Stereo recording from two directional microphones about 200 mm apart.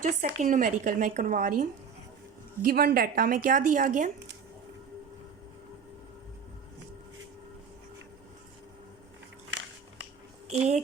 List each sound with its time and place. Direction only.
0.0 s speech: 40° right (ahead or behind)
2.6 s a woman's voice: 50° right (ahead or behind)
9.5 s a sound: 60° right (ahead or behind)
10.5 s speech: 35° right (ahead or behind)